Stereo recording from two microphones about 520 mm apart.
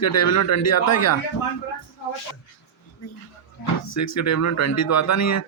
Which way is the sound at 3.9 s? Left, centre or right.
Left.